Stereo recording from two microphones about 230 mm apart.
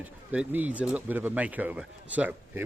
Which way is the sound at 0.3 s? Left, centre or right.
Centre.